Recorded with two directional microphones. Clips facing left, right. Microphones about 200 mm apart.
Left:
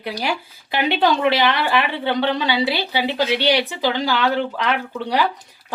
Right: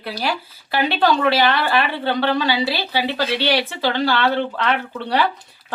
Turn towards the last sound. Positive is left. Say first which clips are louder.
# even
turn(degrees=10)  # may be behind; listen again after turning